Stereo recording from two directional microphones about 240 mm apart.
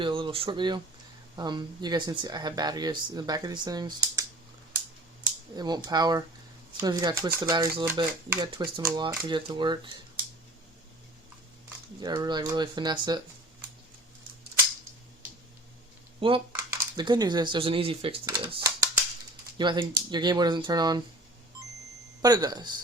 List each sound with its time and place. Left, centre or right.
0.0 s speech: right
11.9 s speech: centre
16.2 s speech: right
18.4 s a sound: centre
19.5 s speech: centre
22.2 s speech: centre